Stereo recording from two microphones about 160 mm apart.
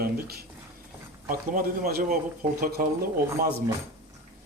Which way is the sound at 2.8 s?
55° right (ahead or behind).